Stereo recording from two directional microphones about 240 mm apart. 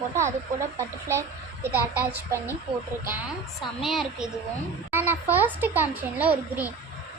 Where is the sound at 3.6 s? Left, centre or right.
Centre.